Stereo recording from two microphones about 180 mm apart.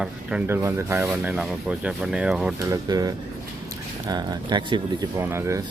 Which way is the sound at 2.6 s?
15° right (ahead or behind).